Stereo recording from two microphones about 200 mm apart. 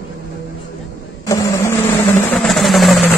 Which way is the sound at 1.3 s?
15° left (ahead or behind).